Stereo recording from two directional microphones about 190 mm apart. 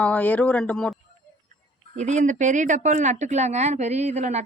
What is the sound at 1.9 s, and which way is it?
Speech, 40° right (ahead or behind).